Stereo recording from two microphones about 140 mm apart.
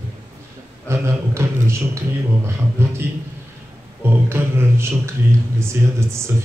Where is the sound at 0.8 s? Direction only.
20° right (ahead or behind).